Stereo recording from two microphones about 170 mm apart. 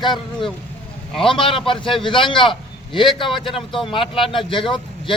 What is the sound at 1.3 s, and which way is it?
A man's voice, 30° left (ahead or behind).